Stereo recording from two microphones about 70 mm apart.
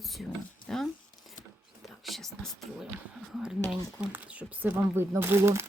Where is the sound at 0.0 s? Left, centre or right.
Centre.